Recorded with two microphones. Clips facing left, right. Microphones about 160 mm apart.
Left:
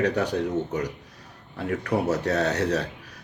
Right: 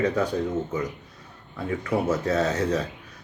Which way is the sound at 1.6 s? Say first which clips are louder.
Even; 70° left (ahead or behind).